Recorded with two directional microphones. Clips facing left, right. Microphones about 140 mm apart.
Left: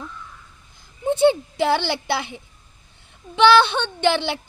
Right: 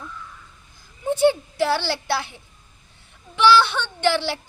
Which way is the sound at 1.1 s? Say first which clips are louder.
Left 1 dB; 20° left (ahead or behind).